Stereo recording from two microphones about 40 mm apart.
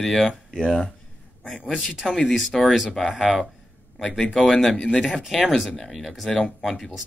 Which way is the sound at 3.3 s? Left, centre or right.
Centre.